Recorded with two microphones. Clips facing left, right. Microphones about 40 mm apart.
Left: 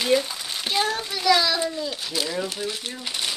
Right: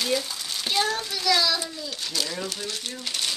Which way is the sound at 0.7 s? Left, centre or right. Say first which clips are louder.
Left 1 dB; centre.